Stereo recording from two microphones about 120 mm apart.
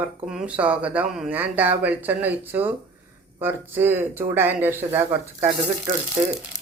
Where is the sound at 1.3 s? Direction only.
15° right (ahead or behind).